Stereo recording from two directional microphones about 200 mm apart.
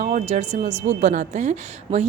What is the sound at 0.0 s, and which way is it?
A woman's voice, 35° right (ahead or behind).